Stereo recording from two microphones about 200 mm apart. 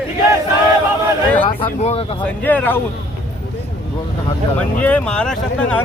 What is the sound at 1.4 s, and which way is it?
Speech, 30° left (ahead or behind).